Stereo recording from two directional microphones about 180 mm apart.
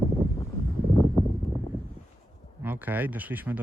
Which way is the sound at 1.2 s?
Centre (ahead or behind).